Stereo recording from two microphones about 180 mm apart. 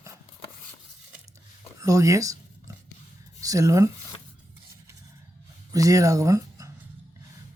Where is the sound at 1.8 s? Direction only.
20° right (ahead or behind).